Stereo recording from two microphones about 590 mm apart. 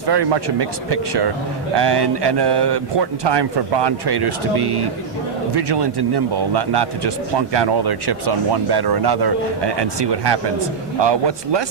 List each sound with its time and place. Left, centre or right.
0.1 s speech: right